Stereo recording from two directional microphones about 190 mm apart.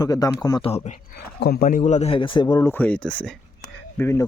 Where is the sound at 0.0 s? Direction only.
20° left (ahead or behind).